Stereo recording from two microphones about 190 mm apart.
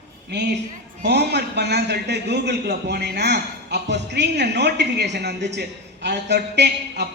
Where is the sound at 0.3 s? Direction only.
60° right (ahead or behind).